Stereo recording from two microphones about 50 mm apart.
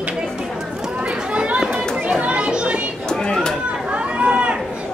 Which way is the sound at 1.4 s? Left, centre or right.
Centre.